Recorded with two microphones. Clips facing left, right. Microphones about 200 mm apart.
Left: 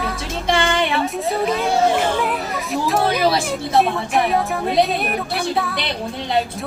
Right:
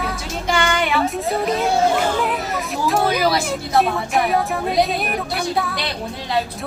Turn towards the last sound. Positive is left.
turn(degrees=0)  # may be behind; listen again after turning